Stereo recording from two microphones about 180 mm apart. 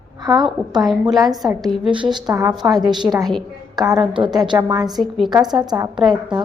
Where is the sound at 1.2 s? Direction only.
20° right (ahead or behind).